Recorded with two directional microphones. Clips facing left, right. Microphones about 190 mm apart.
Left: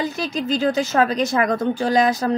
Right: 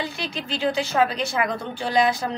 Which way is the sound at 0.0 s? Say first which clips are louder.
Left 6 dB; 45° left (ahead or behind).